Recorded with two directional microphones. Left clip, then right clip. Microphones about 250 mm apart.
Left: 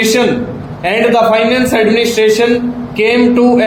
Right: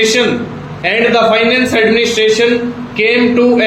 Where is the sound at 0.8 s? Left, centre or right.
Left.